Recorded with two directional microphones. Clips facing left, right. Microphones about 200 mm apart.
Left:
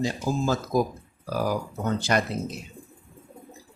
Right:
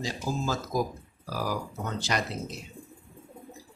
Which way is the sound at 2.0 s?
55° left (ahead or behind).